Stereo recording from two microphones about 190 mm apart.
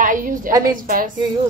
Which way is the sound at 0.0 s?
45° right (ahead or behind).